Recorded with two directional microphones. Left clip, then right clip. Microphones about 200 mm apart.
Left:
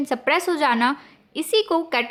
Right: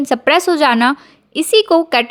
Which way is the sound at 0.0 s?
30° right (ahead or behind).